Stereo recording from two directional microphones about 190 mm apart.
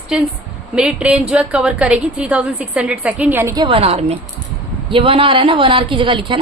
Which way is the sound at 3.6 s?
30° right (ahead or behind).